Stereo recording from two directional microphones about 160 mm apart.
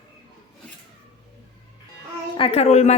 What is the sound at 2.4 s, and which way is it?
Speech, 40° left (ahead or behind).